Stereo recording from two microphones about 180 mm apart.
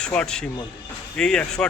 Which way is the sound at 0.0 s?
5° left (ahead or behind).